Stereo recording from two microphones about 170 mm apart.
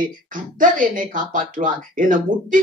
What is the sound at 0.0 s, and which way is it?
Speech, 50° right (ahead or behind).